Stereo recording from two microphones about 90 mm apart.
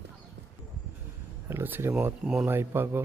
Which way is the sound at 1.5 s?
25° right (ahead or behind).